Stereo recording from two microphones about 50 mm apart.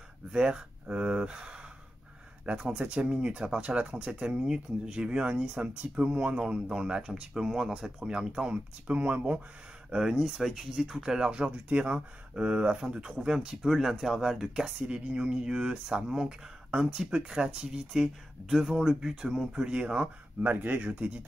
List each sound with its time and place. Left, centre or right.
0.3 s speech: right
5.9 s speech: right
6.4 s speech: centre
8.5 s speech: right
9.8 s speech: centre
14.9 s speech: right
20.5 s speech: right